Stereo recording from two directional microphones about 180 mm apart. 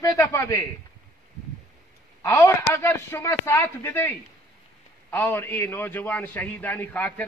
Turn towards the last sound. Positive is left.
turn(degrees=10)  # may be behind; listen again after turning